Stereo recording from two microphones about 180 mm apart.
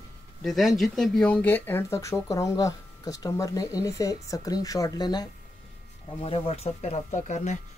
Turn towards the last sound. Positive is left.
turn(degrees=40)  # may be behind; listen again after turning